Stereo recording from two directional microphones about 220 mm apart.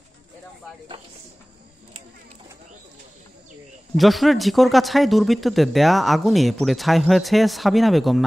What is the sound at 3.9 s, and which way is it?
Speech, centre (ahead or behind).